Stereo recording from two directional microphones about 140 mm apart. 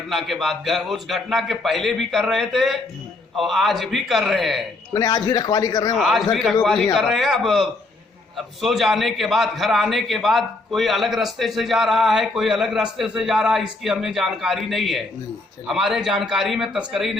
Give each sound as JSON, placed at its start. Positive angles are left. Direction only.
{"t": 0.1, "sound": "a man's voice", "side_deg": 0}
{"t": 4.9, "sound": "a man's voice", "side_deg": 25}
{"t": 6.0, "sound": "a man's voice", "side_deg": 0}